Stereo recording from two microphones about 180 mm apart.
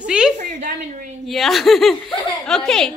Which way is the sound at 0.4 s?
45° right (ahead or behind).